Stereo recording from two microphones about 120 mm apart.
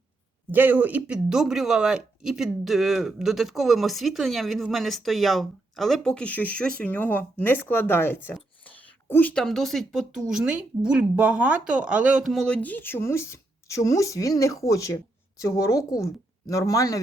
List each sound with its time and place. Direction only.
0.5 s speech: 15° right (ahead or behind); by 9.3 s 15° left (ahead or behind)
9.3 s a woman's voice: 5° left (ahead or behind)
12.5 s speech: 15° left (ahead or behind)